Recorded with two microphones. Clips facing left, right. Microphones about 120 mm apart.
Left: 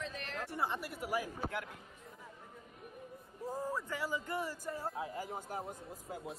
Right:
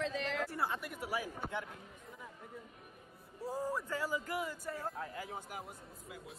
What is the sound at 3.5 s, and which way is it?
Speech, 10° right (ahead or behind).